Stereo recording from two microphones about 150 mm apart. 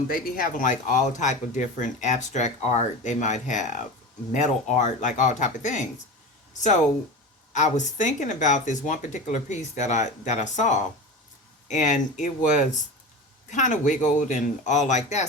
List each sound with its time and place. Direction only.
0.1 s speech: 70° left (ahead or behind)
7.5 s speech: 55° left (ahead or behind)